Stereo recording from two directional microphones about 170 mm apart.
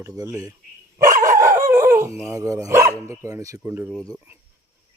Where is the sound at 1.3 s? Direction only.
15° right (ahead or behind).